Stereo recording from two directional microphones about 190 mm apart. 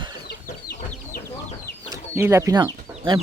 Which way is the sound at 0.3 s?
55° left (ahead or behind).